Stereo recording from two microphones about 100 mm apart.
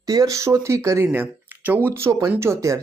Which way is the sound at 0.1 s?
35° right (ahead or behind).